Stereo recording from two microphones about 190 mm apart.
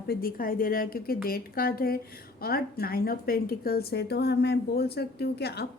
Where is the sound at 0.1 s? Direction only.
50° left (ahead or behind).